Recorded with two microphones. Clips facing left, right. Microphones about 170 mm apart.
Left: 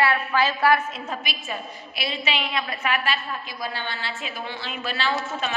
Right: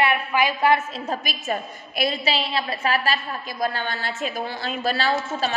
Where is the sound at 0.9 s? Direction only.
35° right (ahead or behind).